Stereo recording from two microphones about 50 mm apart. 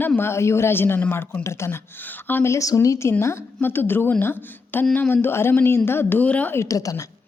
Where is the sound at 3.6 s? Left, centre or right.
Left.